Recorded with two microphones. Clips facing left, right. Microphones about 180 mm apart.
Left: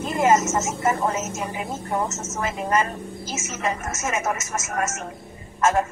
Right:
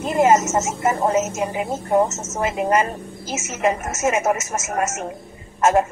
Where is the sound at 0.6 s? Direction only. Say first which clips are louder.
Right 3 dB; 35° right (ahead or behind).